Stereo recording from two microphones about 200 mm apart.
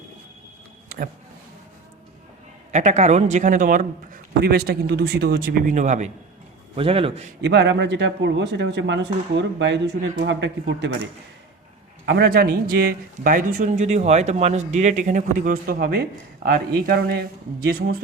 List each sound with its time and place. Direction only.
0.9 s a sound: 45° right (ahead or behind)
2.7 s a man's voice: 35° right (ahead or behind)
7.4 s speech: 60° right (ahead or behind)
12.0 s speech: 55° right (ahead or behind)